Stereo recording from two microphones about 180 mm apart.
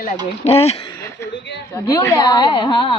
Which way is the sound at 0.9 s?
15° left (ahead or behind).